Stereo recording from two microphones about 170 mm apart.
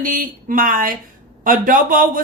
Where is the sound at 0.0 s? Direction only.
50° right (ahead or behind).